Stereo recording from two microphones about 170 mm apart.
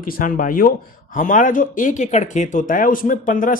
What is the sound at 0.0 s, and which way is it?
Speech, 55° left (ahead or behind).